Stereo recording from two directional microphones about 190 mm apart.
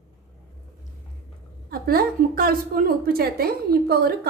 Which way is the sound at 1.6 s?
55° right (ahead or behind).